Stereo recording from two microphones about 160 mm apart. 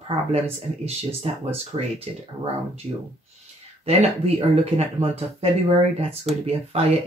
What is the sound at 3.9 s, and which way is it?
Speech, 40° right (ahead or behind).